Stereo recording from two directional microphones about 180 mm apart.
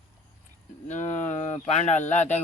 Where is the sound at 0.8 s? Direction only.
40° left (ahead or behind).